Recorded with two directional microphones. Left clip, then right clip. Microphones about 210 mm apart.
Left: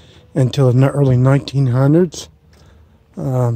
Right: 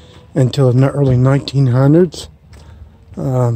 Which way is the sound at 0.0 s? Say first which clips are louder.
Right 2 dB; 25° left (ahead or behind).